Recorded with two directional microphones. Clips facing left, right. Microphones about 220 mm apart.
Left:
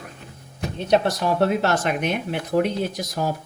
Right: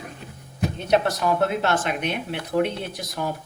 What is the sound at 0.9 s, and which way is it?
Speech, 30° left (ahead or behind).